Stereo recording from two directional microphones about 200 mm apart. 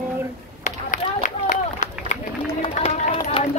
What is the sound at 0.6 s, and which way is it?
Run, 40° left (ahead or behind).